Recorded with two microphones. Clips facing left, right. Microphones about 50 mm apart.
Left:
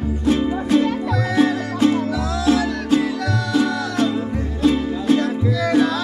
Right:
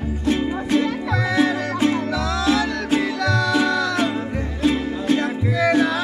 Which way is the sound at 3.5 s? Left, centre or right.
Right.